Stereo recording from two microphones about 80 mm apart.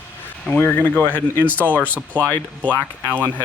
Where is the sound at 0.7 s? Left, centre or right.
Centre.